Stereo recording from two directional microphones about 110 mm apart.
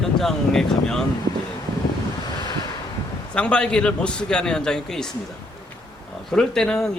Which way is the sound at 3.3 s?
10° left (ahead or behind).